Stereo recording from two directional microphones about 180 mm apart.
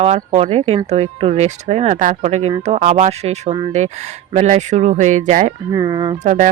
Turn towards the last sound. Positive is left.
turn(degrees=-45)  # may be behind; listen again after turning